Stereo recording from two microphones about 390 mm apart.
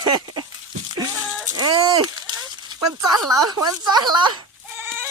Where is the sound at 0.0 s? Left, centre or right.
Centre.